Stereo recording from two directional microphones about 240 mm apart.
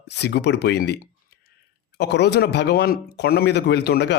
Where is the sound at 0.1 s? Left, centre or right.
Left.